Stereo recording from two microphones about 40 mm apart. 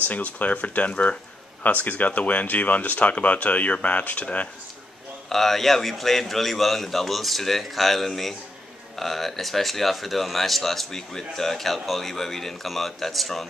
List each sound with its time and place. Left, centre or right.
0.1 s speech: left
5.3 s speech: centre